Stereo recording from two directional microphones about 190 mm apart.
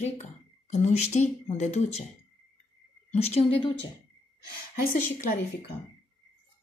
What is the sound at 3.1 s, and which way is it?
Speech, 35° left (ahead or behind).